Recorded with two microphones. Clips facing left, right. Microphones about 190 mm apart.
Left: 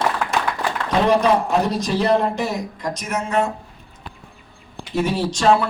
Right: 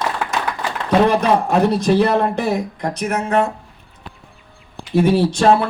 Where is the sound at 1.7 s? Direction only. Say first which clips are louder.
Right 3 dB; 60° right (ahead or behind).